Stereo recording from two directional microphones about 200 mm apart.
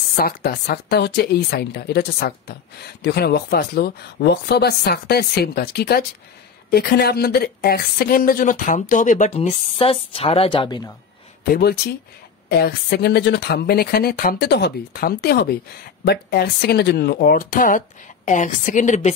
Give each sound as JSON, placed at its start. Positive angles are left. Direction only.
{"t": 0.2, "sound": "a woman's voice", "side_deg": 50}
{"t": 11.5, "sound": "speech", "side_deg": 55}